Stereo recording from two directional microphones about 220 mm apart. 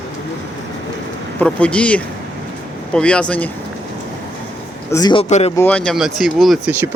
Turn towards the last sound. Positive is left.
turn(degrees=-5)  # may be behind; listen again after turning